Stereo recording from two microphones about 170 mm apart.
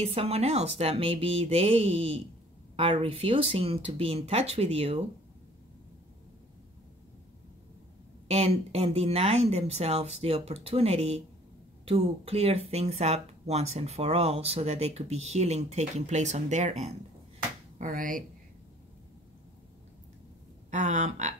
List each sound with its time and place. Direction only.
0.0 s speech: 35° right (ahead or behind)
8.3 s speech: 35° right (ahead or behind)
17.7 s speech: 50° right (ahead or behind)
20.7 s a sound: 45° right (ahead or behind)